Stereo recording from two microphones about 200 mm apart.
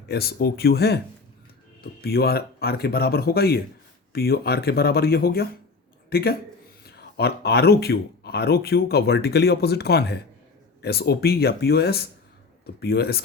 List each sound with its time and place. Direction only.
0.1 s speech: 50° left (ahead or behind)